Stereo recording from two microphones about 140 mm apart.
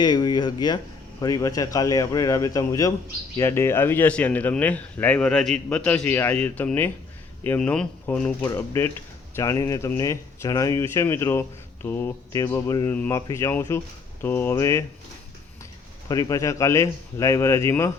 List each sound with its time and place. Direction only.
0.0 s a man's voice: 30° left (ahead or behind); by 8.3 s 5° left (ahead or behind)
8.4 s a man's voice: 20° left (ahead or behind)
16.0 s a man's voice: 25° left (ahead or behind)